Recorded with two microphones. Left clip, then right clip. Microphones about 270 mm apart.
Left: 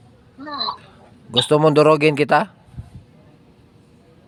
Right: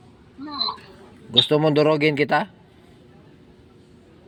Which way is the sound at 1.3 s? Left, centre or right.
Left.